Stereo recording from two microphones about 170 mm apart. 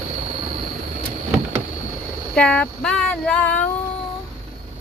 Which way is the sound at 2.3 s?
5° left (ahead or behind).